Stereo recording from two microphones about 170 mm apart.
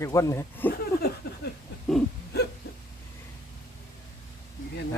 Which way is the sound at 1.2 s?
75° left (ahead or behind).